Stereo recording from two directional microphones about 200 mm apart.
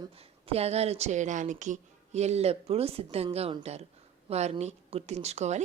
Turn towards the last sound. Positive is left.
turn(degrees=-35)  # may be behind; listen again after turning